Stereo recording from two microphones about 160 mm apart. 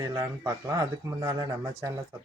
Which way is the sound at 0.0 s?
20° right (ahead or behind).